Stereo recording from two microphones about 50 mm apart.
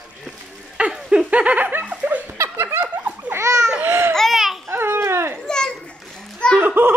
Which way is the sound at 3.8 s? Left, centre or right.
Right.